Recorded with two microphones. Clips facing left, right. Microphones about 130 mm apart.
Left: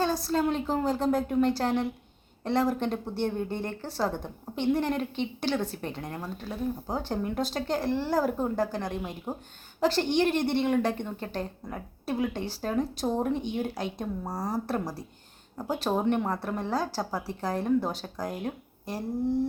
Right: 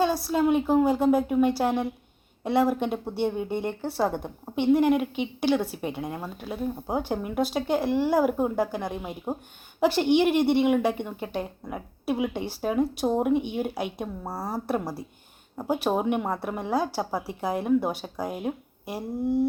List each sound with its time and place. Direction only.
0.3 s a woman's voice: 10° right (ahead or behind)